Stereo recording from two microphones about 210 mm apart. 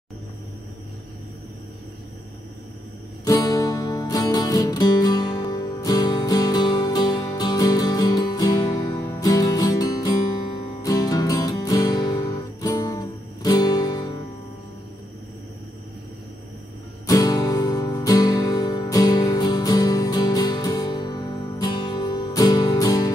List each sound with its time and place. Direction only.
3.3 s music: 15° left (ahead or behind)
17.0 s music: 15° left (ahead or behind)